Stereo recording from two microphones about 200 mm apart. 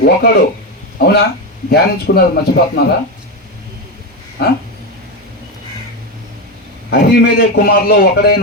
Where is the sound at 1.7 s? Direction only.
55° left (ahead or behind).